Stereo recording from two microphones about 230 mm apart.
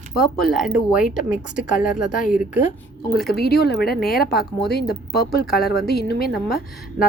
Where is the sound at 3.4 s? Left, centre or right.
Left.